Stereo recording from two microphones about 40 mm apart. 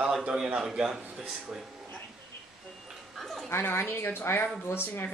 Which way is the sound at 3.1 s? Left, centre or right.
Centre.